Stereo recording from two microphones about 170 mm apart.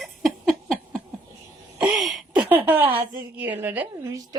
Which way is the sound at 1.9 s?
Centre (ahead or behind).